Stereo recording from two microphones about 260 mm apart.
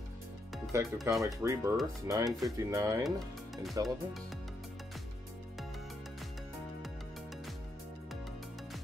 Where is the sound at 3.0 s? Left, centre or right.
Centre.